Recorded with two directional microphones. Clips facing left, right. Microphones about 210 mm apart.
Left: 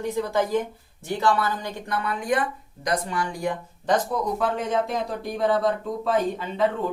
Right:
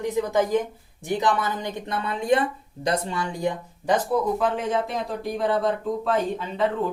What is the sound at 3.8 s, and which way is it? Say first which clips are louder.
Speech: right 2 dB; 5° right (ahead or behind).